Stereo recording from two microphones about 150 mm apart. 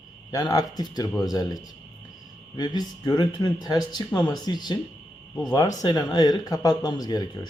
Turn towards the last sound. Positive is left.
turn(degrees=25)  # may be behind; listen again after turning